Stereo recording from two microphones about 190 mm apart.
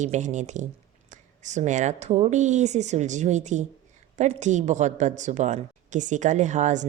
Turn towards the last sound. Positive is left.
turn(degrees=-40)  # may be behind; listen again after turning